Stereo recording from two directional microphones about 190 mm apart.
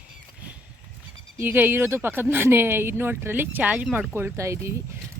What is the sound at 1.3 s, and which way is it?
Speech, 10° right (ahead or behind).